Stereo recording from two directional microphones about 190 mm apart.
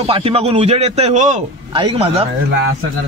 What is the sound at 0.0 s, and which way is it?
Speech, 30° right (ahead or behind).